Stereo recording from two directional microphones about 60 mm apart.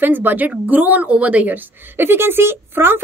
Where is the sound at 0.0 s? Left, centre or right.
Right.